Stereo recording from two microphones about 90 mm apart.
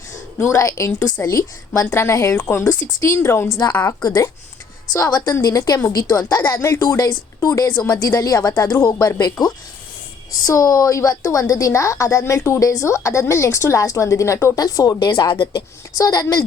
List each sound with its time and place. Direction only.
0.5 s a woman's voice: 35° left (ahead or behind)
3.6 s a woman's voice: 40° left (ahead or behind)
10.4 s a woman's voice: 40° left (ahead or behind); by 15.6 s 55° left (ahead or behind)
16.0 s a woman's voice: 40° left (ahead or behind)